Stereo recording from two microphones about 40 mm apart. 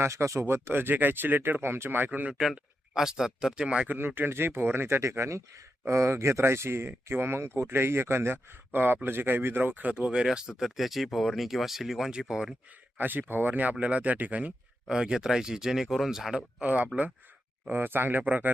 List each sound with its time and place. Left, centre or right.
0.0 s speech: right
2.0 s speech: right
2.4 s speech: centre
3.9 s speech: right
6.4 s speech: right
9.0 s speech: right
10.0 s speech: right
10.6 s speech: centre
13.0 s speech: right
14.8 s speech: centre
16.6 s speech: right
17.7 s speech: right
18.3 s speech: right